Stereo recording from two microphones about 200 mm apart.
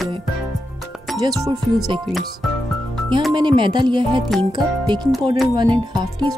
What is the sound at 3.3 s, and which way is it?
Speech, 25° right (ahead or behind).